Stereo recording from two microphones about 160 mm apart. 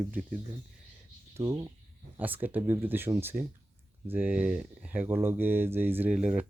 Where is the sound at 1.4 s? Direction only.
20° right (ahead or behind).